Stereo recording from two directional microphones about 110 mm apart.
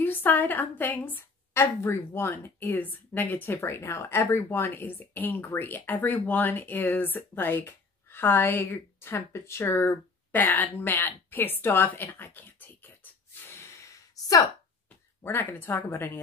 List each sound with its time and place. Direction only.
0.0 s a woman's voice: 15° left (ahead or behind)
15.2 s a woman's voice: 20° left (ahead or behind)